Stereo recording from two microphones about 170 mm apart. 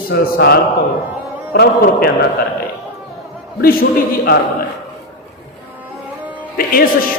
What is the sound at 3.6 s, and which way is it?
Speech, 60° left (ahead or behind).